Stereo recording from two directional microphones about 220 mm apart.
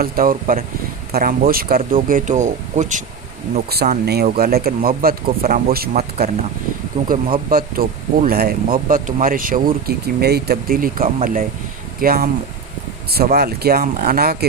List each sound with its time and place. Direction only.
0.0 s speech: 40° right (ahead or behind)
3.7 s speech: 45° right (ahead or behind)
7.5 s speech: 40° right (ahead or behind)